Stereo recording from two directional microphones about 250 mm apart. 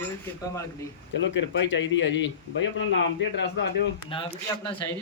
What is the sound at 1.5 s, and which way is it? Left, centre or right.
Speech, left.